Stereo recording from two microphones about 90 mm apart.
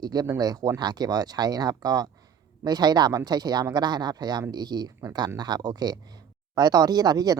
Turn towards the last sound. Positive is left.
turn(degrees=-45)  # may be behind; listen again after turning